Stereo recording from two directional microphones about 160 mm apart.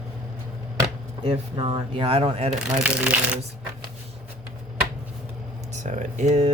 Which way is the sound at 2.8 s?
5° right (ahead or behind).